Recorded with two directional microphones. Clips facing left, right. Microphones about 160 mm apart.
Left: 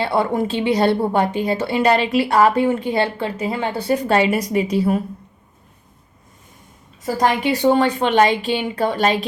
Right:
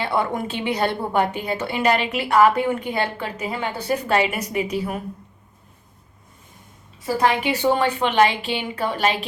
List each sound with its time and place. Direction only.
0.0 s a woman's voice: 35° left (ahead or behind)
7.7 s a woman's voice: 35° left (ahead or behind)